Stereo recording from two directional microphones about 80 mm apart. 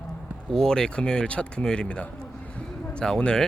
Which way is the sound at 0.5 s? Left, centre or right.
Centre.